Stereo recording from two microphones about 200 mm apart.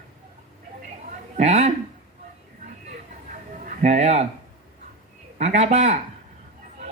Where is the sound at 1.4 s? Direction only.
35° right (ahead or behind).